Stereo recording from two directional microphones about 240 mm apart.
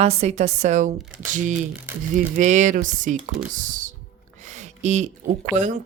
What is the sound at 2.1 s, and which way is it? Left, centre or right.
Speech, right.